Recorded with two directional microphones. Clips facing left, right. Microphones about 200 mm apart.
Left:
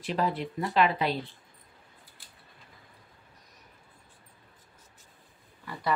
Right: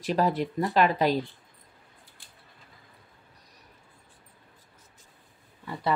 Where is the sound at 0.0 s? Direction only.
40° right (ahead or behind).